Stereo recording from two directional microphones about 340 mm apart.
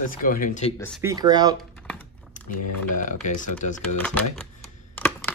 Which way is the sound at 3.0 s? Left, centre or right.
Left.